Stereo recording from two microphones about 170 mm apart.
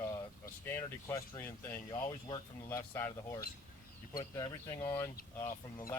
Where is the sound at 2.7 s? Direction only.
15° left (ahead or behind).